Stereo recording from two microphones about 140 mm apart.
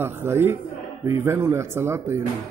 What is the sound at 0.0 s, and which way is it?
Speech, 15° right (ahead or behind).